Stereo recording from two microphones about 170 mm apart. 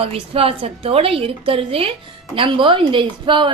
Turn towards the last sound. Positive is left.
turn(degrees=-30)  # may be behind; listen again after turning